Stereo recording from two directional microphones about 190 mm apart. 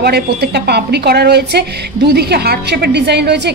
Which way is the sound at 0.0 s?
55° right (ahead or behind).